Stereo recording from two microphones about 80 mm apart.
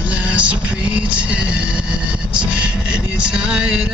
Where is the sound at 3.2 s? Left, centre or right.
Centre.